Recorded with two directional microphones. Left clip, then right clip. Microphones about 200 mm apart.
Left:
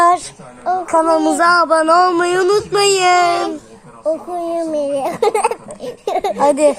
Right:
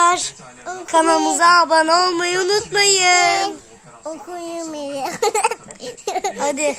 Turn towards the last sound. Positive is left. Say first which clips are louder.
# left 8 dB
turn(degrees=5)  # may be behind; listen again after turning